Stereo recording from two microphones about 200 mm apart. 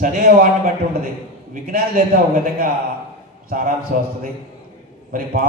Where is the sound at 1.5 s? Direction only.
50° right (ahead or behind).